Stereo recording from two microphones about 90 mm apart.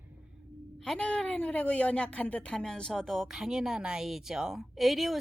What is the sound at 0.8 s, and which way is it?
A woman's voice, 10° left (ahead or behind).